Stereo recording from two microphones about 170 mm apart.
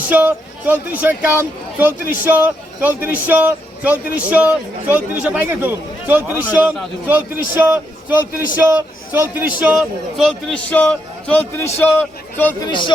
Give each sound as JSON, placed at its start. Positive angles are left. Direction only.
{"t": 0.1, "sound": "speech", "side_deg": -10}
{"t": 12.6, "sound": "speech", "side_deg": 25}